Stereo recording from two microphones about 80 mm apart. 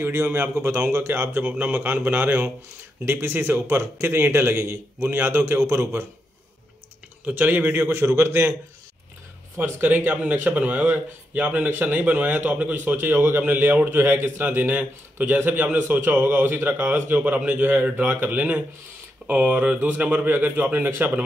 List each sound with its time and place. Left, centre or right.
0.0 s a man's voice: right
7.2 s a man's voice: right
9.6 s speech: right